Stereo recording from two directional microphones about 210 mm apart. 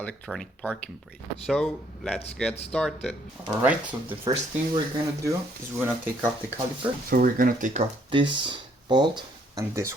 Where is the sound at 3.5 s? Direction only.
5° right (ahead or behind).